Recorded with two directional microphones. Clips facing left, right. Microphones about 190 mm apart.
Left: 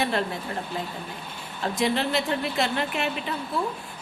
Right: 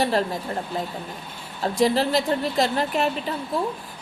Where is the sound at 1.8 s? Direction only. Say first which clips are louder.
Right 5 dB; 35° right (ahead or behind).